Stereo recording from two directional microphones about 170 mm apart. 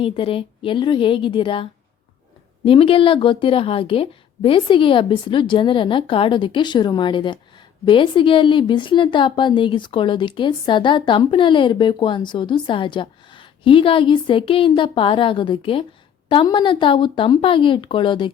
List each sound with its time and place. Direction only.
0.0 s a woman's voice: 35° left (ahead or behind)
2.6 s a woman's voice: 35° left (ahead or behind)